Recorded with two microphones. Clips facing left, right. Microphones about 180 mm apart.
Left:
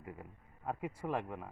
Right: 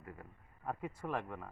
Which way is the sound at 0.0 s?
20° left (ahead or behind).